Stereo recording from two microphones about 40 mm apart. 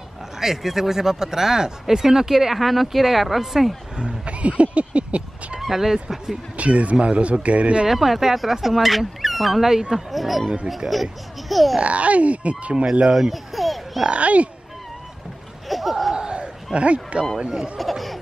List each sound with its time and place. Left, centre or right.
0.4 s speech: centre
3.9 s speech: right
5.6 s speech: centre
6.5 s speech: right
7.9 s speech: centre
11.8 s speech: right
13.1 s a child's voice: centre
14.0 s speech: right
15.7 s a sound: centre
16.2 s a sound: right
16.7 s speech: right
17.4 s speech: centre
17.7 s speech: centre